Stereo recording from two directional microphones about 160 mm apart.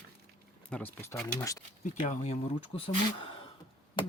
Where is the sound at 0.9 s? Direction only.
15° left (ahead or behind).